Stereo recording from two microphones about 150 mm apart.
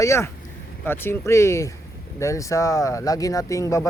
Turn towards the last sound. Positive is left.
turn(degrees=20)  # may be behind; listen again after turning